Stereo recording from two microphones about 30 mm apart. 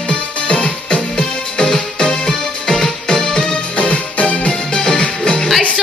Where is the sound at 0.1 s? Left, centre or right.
Left.